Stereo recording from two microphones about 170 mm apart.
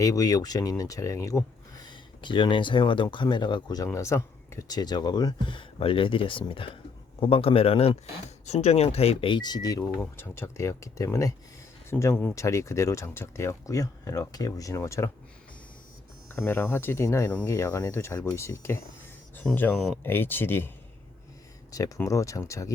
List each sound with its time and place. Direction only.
0.0 s a man's voice: 20° left (ahead or behind)
16.3 s speech: 15° left (ahead or behind)
21.7 s speech: 20° left (ahead or behind)